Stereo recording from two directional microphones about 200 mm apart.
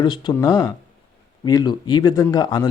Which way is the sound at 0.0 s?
20° left (ahead or behind).